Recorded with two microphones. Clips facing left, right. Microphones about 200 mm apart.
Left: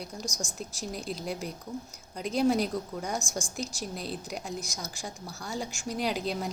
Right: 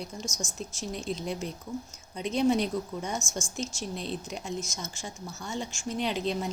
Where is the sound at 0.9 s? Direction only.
5° left (ahead or behind).